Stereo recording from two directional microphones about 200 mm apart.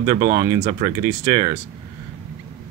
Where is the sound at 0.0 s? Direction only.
15° right (ahead or behind).